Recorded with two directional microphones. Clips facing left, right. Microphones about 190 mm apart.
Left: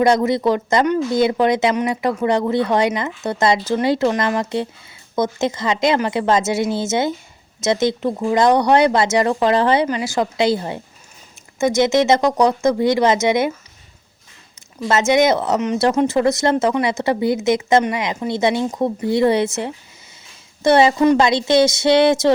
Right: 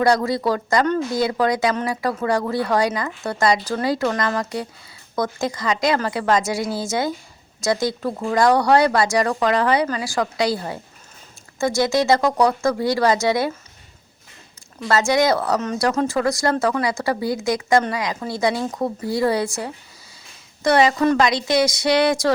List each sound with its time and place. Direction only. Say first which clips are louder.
0.0 s speech: left 3 dB; 20° left (ahead or behind)
14.8 s speech: left 3 dB; 20° left (ahead or behind)